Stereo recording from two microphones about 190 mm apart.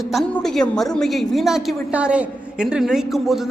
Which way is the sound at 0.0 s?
Centre (ahead or behind).